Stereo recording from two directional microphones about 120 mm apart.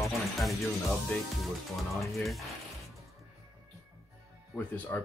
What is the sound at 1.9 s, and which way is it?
Speech, centre (ahead or behind).